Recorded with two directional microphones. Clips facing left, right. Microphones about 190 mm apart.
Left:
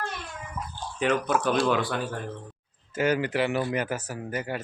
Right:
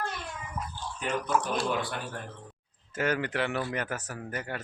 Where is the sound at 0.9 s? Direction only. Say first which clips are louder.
Left 5 dB; 75° left (ahead or behind).